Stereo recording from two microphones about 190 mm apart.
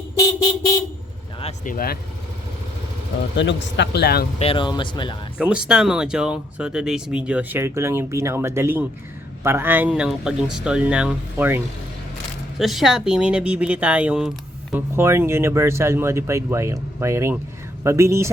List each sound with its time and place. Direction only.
1.6 s speech: 50° left (ahead or behind)
3.3 s a man's voice: 65° left (ahead or behind)
4.4 s speech: 30° left (ahead or behind)
5.4 s speech: 5° right (ahead or behind)